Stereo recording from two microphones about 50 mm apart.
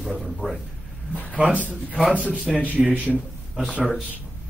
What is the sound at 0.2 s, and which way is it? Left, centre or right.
Speech, centre.